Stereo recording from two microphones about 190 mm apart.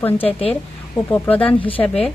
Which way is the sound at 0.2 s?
30° left (ahead or behind).